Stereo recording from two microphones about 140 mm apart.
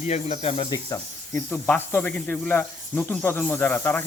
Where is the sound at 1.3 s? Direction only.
15° left (ahead or behind).